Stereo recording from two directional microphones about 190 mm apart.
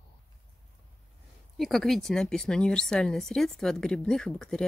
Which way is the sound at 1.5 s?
Centre (ahead or behind).